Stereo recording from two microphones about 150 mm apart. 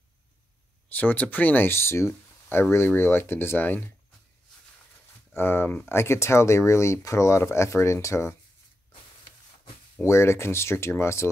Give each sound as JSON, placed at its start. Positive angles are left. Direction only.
{"t": 0.8, "sound": "speech", "side_deg": 10}
{"t": 5.3, "sound": "speech", "side_deg": 15}
{"t": 10.0, "sound": "speech", "side_deg": 20}